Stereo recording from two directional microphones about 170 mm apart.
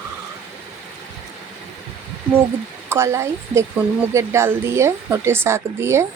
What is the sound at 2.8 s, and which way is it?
A woman's voice, 15° right (ahead or behind).